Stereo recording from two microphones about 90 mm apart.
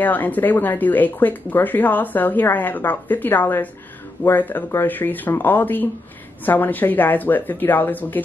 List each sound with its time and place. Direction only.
0.0 s speech: 20° left (ahead or behind)